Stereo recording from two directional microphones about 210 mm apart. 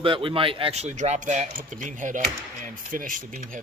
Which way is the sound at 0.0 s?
25° right (ahead or behind).